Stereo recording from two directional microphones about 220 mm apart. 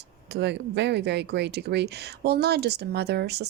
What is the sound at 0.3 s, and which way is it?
Speech, 50° right (ahead or behind).